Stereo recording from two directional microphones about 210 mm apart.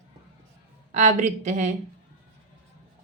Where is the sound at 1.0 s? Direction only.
35° right (ahead or behind).